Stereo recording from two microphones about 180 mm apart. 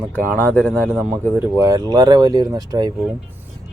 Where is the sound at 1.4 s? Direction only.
15° right (ahead or behind).